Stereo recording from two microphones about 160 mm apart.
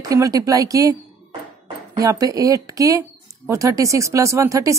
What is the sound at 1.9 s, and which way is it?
Speech, 20° right (ahead or behind).